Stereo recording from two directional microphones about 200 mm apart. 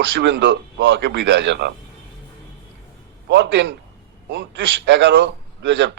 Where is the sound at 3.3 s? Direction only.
65° right (ahead or behind).